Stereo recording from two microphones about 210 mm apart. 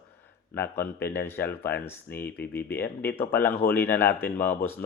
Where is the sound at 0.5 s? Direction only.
10° left (ahead or behind).